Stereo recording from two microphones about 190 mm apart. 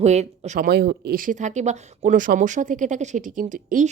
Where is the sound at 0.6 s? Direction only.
55° right (ahead or behind).